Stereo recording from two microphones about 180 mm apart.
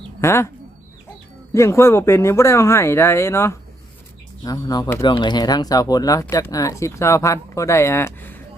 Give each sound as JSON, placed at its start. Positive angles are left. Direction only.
{"t": 0.2, "sound": "speech", "side_deg": 15}
{"t": 1.5, "sound": "speech", "side_deg": 15}